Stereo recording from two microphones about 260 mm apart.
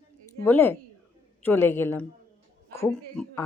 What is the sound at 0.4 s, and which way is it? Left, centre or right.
A woman's voice, centre.